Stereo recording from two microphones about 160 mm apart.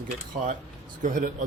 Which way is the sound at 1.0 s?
55° right (ahead or behind).